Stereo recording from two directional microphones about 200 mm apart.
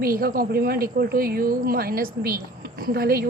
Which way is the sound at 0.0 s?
50° right (ahead or behind).